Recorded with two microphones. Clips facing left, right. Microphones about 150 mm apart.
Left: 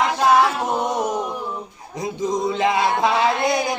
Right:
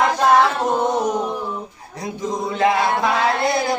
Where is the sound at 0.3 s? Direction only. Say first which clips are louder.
Even; 10° left (ahead or behind).